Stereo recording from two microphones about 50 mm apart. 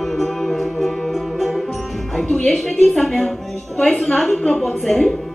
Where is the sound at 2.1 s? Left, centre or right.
Centre.